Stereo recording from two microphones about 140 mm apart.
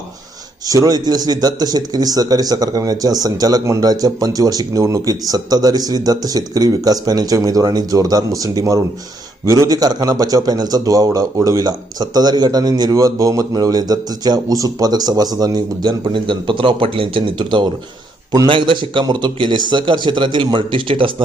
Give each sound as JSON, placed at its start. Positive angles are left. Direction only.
{"t": 0.7, "sound": "a man's voice", "side_deg": -25}